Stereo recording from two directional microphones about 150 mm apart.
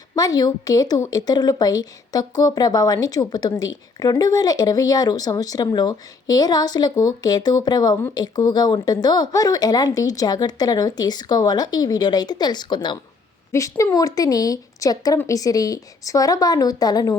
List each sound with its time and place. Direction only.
0.2 s speech: 25° left (ahead or behind)
13.5 s speech: 20° left (ahead or behind)